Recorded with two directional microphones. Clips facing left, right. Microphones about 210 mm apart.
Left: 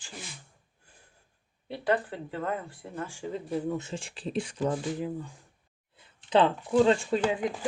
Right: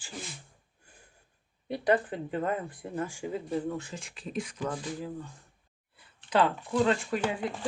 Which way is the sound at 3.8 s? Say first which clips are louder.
Left 4 dB; 25° left (ahead or behind).